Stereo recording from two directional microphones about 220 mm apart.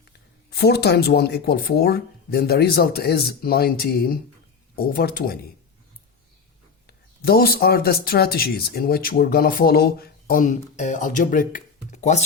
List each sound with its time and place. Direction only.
0.5 s speech: 50° left (ahead or behind)
6.8 s speech: 45° left (ahead or behind)